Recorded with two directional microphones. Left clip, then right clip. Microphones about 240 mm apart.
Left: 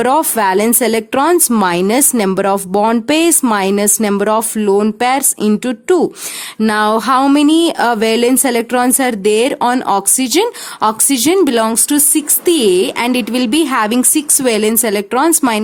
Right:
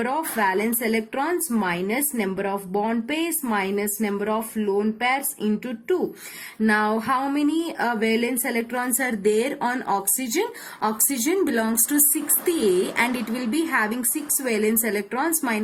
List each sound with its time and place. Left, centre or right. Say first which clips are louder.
0.0 s a woman's voice: left 11 dB; left
13.0 s a woman's voice: left 9 dB; left